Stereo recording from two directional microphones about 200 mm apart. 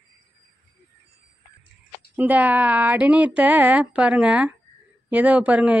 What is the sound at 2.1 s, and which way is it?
Speech, 10° right (ahead or behind).